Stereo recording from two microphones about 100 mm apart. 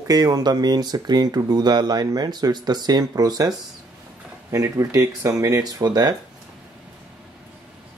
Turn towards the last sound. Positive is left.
turn(degrees=-40)  # may be behind; listen again after turning